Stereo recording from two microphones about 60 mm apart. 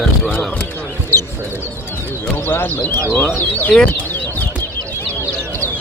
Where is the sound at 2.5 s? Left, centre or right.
Left.